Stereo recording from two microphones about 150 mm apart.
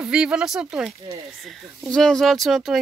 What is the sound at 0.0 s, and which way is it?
Speech, 5° right (ahead or behind).